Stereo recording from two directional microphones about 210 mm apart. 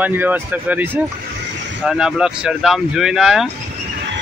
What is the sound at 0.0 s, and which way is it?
Speech, 10° right (ahead or behind).